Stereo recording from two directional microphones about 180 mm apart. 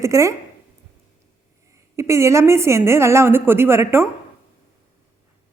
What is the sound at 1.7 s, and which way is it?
A woman's voice, 15° right (ahead or behind).